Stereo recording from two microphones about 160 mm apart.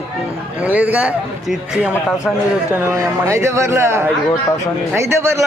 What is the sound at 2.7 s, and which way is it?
A man's voice, 15° right (ahead or behind).